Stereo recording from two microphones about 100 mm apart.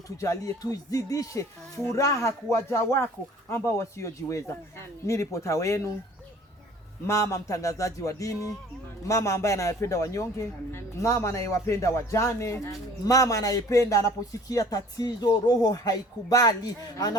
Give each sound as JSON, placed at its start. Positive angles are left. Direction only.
{"t": 0.2, "sound": "a man's voice", "side_deg": 30}
{"t": 7.1, "sound": "a man's voice", "side_deg": 30}